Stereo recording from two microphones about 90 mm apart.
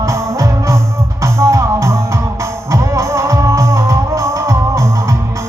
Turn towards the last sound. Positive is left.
turn(degrees=-35)  # may be behind; listen again after turning